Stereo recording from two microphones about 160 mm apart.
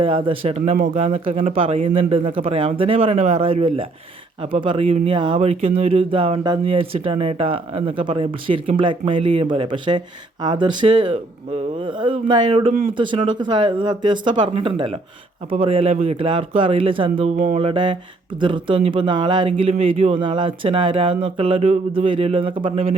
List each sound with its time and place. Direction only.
0.0 s speech: 30° right (ahead or behind)
0.7 s speech: 55° right (ahead or behind); by 17.2 s 35° right (ahead or behind)
17.2 s a sound: 50° right (ahead or behind)
17.6 s speech: 35° right (ahead or behind)